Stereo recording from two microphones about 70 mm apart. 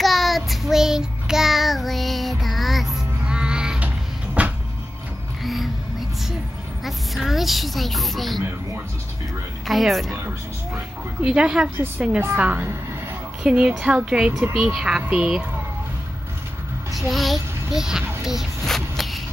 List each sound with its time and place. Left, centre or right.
0.0 s child singing: centre
3.3 s a sound: centre
5.4 s music: centre
6.8 s a sound: centre
9.7 s speech: centre
10.1 s speech: right
11.2 s speech: centre
17.1 s a child's voice: centre
18.2 s a sound: centre